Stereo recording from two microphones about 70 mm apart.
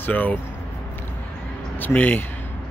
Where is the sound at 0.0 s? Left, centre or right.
Left.